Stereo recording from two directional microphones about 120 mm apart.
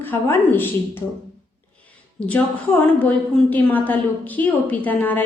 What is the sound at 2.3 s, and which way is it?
A woman's voice, 15° left (ahead or behind).